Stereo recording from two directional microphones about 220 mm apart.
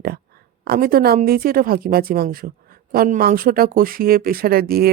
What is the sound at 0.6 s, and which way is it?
A woman's voice, 45° right (ahead or behind).